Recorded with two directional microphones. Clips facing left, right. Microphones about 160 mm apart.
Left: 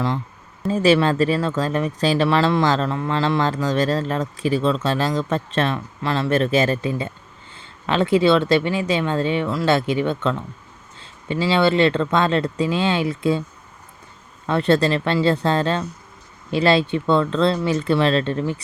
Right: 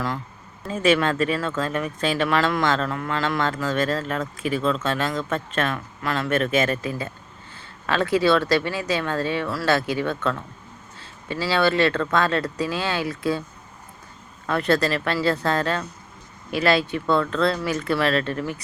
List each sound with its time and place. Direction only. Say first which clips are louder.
0.7 s speech: left 4 dB; 30° left (ahead or behind)
14.4 s speech: left 4 dB; 25° left (ahead or behind)